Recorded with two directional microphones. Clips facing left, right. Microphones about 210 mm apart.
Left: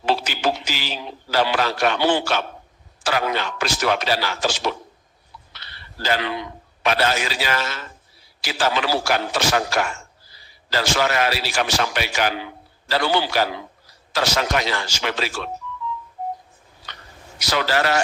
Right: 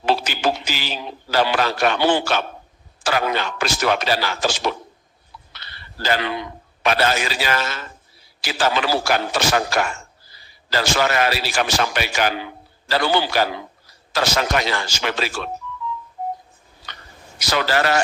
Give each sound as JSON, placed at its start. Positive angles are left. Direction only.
{"t": 0.0, "sound": "a man's voice", "side_deg": -50}
{"t": 5.5, "sound": "a sound", "side_deg": -50}
{"t": 6.8, "sound": "a man's voice", "side_deg": -50}
{"t": 17.4, "sound": "a man's voice", "side_deg": -50}